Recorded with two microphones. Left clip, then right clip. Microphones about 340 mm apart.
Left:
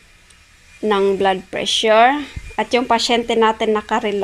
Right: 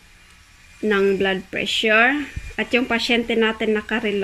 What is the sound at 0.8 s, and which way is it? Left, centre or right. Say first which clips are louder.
A woman's voice: left 3 dB; centre.